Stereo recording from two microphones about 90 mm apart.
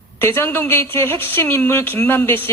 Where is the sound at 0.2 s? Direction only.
25° left (ahead or behind).